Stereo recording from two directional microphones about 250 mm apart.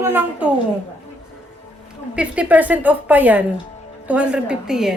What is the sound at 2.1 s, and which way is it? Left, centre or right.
A woman's voice, centre.